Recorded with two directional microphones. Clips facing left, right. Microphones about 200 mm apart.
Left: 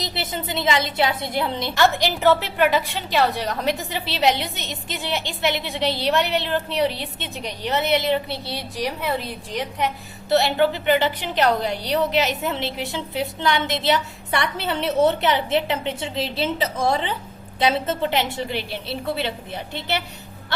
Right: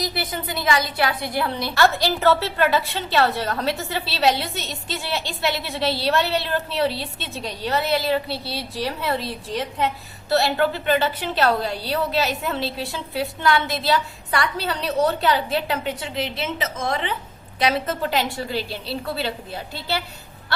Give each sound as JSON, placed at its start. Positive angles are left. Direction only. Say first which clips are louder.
{"t": 0.0, "sound": "a woman's voice", "louder": "right 1 dB", "side_deg": 25}